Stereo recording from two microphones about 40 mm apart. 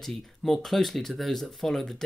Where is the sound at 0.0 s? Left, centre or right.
Centre.